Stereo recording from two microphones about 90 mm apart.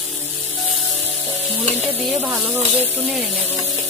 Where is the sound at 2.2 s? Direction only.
20° right (ahead or behind).